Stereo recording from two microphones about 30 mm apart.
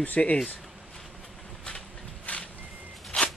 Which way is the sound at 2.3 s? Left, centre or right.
Left.